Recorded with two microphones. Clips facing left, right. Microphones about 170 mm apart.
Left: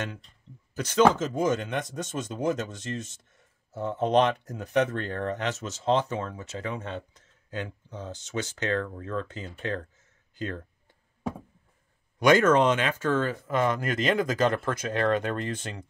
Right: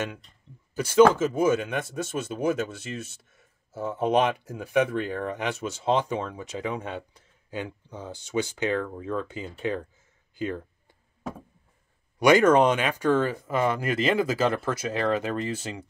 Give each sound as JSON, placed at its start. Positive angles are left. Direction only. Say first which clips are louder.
{"t": 0.7, "sound": "speech", "louder": "right 4 dB", "side_deg": -10}
{"t": 10.3, "sound": "a sound", "louder": "right 4 dB", "side_deg": -10}
{"t": 12.2, "sound": "speech", "louder": "right 2 dB", "side_deg": -10}